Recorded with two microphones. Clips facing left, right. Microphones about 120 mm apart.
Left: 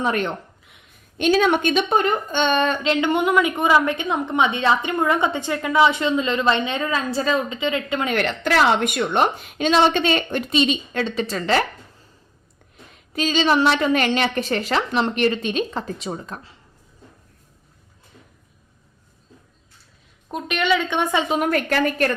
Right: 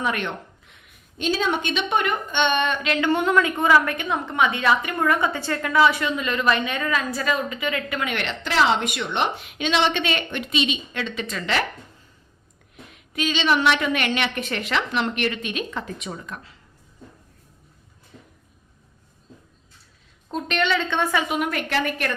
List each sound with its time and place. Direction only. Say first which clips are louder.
0.0 s a woman's voice: left 4 dB; 35° left (ahead or behind)
1.2 s a woman's voice: left 6 dB; 65° left (ahead or behind); by 8.0 s 25° left (ahead or behind)
8.0 s a woman's voice: left 6 dB; 40° left (ahead or behind)
13.1 s a woman's voice: left 3 dB; 35° left (ahead or behind)
20.3 s a woman's voice: left 2 dB; 10° left (ahead or behind); by 21.4 s 25° left (ahead or behind)
21.4 s a woman's voice: left 4 dB; 45° left (ahead or behind)